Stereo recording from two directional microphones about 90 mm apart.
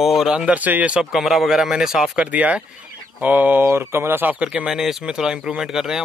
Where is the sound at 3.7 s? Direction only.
30° right (ahead or behind).